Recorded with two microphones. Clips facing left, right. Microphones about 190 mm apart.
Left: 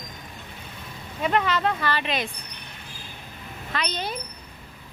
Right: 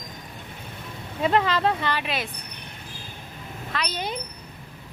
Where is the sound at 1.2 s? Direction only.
30° right (ahead or behind).